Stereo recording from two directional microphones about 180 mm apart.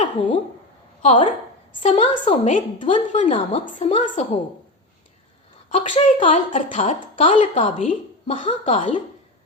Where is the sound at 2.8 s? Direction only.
30° left (ahead or behind).